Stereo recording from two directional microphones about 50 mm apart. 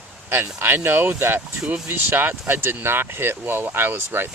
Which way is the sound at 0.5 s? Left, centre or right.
Right.